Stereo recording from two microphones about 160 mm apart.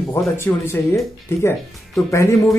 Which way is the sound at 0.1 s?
15° left (ahead or behind).